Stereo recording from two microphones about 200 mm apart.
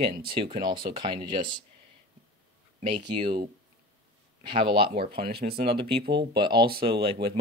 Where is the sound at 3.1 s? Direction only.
20° right (ahead or behind).